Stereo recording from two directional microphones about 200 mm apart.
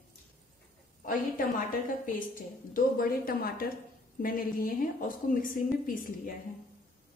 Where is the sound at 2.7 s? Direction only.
45° left (ahead or behind).